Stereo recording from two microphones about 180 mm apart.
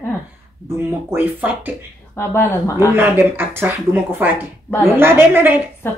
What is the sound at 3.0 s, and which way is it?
Speech, 10° right (ahead or behind).